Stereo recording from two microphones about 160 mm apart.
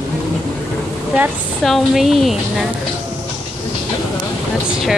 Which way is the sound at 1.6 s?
Centre (ahead or behind).